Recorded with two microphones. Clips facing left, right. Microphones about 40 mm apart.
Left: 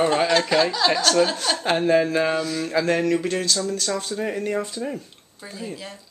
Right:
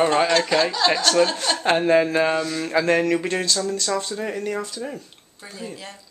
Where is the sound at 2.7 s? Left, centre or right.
Centre.